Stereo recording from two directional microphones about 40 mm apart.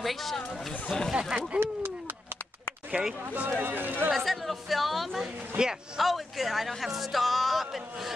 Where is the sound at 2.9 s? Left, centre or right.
Right.